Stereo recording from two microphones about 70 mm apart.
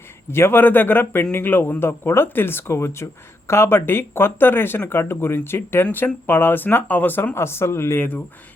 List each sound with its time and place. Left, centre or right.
0.3 s a man's voice: left
7.3 s a man's voice: left